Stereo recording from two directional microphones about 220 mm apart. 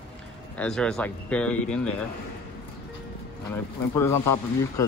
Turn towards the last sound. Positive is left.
turn(degrees=10)  # may be behind; listen again after turning